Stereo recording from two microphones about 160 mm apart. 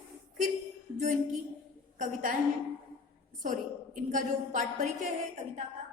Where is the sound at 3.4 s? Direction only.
55° right (ahead or behind).